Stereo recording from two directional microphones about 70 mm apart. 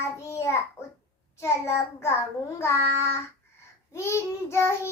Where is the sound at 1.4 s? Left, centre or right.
Left.